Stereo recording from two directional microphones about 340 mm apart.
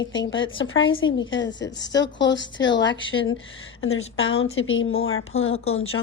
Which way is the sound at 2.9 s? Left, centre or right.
Left.